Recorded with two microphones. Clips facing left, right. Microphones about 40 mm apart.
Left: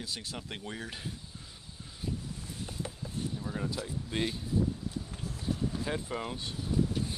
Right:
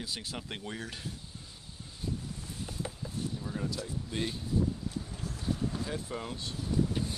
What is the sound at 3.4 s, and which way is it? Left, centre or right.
Speech, centre.